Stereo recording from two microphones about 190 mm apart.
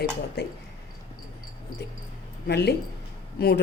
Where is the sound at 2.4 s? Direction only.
60° left (ahead or behind).